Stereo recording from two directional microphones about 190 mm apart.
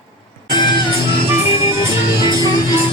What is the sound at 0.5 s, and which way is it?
Music, 25° left (ahead or behind).